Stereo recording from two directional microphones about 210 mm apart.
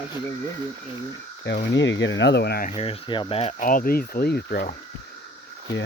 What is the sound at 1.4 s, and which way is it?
Speech, 55° left (ahead or behind).